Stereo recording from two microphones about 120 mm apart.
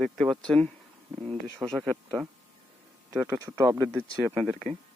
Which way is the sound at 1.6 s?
25° right (ahead or behind).